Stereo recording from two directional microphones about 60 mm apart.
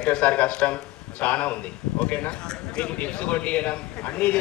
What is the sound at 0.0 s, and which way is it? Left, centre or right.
Speech, left.